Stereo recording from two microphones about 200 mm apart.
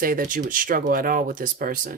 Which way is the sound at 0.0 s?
45° right (ahead or behind).